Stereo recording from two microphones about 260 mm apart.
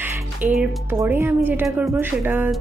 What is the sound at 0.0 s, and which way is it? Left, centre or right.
A woman's voice, centre.